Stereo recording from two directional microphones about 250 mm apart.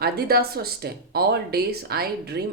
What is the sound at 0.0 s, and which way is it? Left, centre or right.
Speech, right.